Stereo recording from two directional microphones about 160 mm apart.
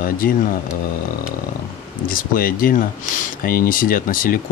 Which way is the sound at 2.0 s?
60° left (ahead or behind).